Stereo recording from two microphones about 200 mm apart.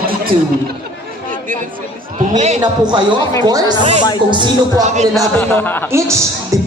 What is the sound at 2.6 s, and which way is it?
Speech, 20° right (ahead or behind).